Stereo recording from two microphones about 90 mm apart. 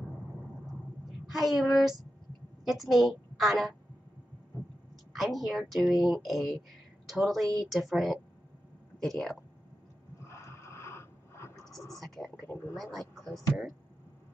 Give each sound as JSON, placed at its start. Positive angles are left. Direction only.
{"t": 1.3, "sound": "a woman's voice", "side_deg": -5}
{"t": 5.1, "sound": "a woman's voice", "side_deg": -5}
{"t": 10.2, "sound": "a sound", "side_deg": 30}
{"t": 12.7, "sound": "a woman's voice", "side_deg": 0}